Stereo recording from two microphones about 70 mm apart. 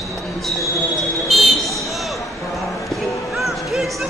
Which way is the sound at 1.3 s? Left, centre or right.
Centre.